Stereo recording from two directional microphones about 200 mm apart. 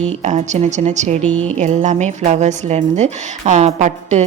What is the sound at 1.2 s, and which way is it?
Speech, 5° left (ahead or behind).